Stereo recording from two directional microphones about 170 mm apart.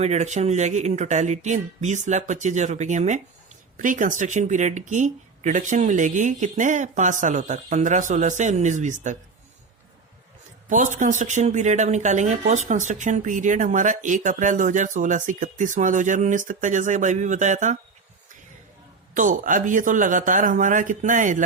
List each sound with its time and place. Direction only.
0.0 s speech: 45° right (ahead or behind)
10.7 s speech: 50° right (ahead or behind)
19.1 s speech: 50° right (ahead or behind)